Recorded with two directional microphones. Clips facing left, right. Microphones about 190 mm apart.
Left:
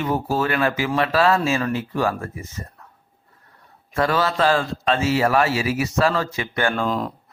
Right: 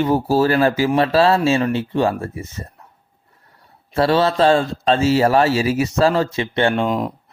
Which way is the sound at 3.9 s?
30° right (ahead or behind).